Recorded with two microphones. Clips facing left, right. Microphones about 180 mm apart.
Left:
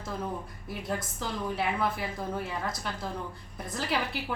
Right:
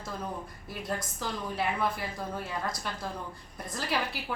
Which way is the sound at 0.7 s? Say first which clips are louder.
Left 2 dB; centre (ahead or behind).